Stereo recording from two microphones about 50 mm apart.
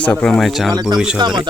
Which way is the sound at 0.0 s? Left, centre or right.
Left.